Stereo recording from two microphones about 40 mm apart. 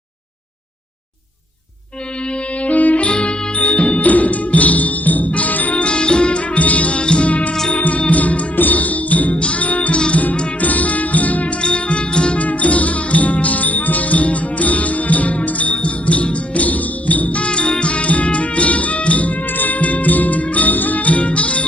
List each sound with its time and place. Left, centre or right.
2.6 s music: left
5.8 s music: left
7.3 s music: left
11.6 s music: left